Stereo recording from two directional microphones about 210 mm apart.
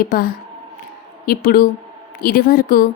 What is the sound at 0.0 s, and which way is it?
A woman's voice, 40° left (ahead or behind).